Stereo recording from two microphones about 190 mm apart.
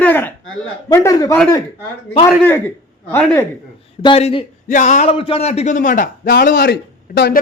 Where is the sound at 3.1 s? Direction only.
10° left (ahead or behind).